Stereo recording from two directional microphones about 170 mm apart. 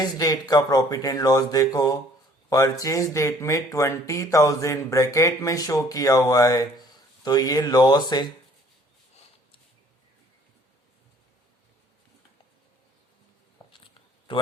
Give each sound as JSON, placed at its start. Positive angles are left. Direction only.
{"t": 0.0, "sound": "speech", "side_deg": 20}
{"t": 13.6, "sound": "a sound", "side_deg": 20}
{"t": 14.3, "sound": "a man's voice", "side_deg": 30}